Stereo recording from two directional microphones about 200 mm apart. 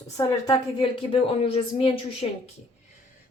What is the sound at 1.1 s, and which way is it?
A woman's voice, 30° left (ahead or behind).